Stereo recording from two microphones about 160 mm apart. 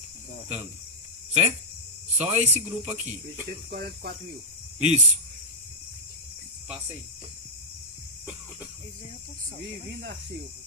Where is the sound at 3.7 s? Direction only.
70° right (ahead or behind).